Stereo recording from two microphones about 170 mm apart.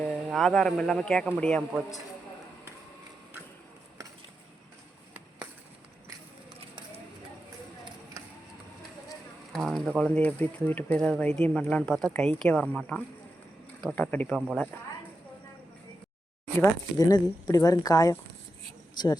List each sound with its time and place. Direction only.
0.1 s speech: centre (ahead or behind)
9.5 s speech: centre (ahead or behind)
17.1 s speech: 20° left (ahead or behind)